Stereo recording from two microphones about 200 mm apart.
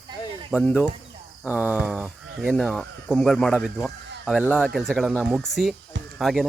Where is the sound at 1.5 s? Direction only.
5° right (ahead or behind).